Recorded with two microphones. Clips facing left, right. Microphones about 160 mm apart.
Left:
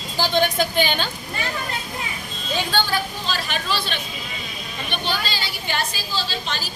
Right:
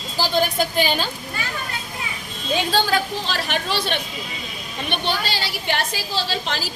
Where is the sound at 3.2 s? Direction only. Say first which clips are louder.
Right 1 dB; 70° right (ahead or behind).